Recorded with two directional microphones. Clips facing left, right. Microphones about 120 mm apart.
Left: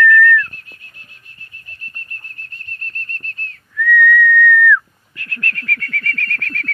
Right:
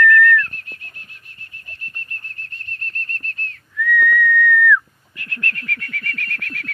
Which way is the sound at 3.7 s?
20° right (ahead or behind).